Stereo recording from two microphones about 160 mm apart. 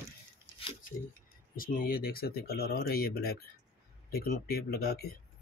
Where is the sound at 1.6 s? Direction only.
65° left (ahead or behind).